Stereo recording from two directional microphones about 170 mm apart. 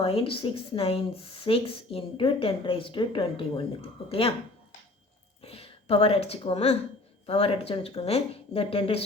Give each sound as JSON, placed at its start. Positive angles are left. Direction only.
{"t": 0.0, "sound": "speech", "side_deg": 35}
{"t": 5.4, "sound": "speech", "side_deg": 35}